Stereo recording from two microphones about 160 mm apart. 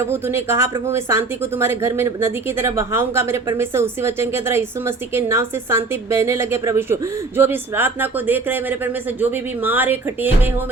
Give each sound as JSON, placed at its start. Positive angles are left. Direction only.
{"t": 0.0, "sound": "speech", "side_deg": -15}